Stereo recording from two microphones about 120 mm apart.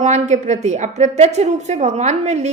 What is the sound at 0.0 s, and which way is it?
A woman's voice, 75° right (ahead or behind).